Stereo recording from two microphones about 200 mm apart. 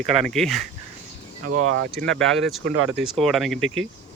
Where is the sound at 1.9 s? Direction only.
5° left (ahead or behind).